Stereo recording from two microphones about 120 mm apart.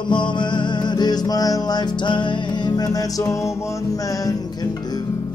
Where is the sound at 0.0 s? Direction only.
40° left (ahead or behind).